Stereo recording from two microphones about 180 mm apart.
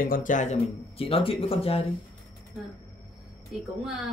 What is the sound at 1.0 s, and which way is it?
Speech, 30° left (ahead or behind).